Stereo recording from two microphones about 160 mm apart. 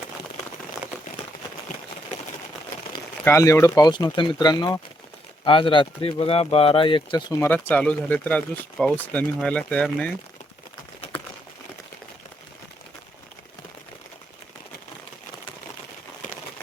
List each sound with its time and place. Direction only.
3.2 s speech: 20° left (ahead or behind)
7.3 s speech: 10° left (ahead or behind)